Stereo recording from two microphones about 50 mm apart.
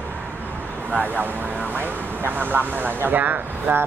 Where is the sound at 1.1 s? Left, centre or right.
Right.